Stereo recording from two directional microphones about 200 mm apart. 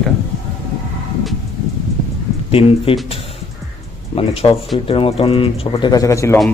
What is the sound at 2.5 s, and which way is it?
Speech, 30° left (ahead or behind).